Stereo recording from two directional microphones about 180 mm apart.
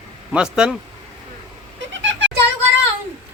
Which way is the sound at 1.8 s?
90° right.